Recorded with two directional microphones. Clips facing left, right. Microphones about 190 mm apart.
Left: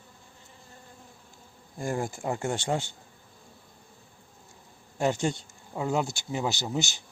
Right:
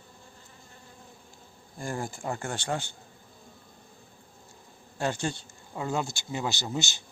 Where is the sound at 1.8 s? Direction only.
20° left (ahead or behind).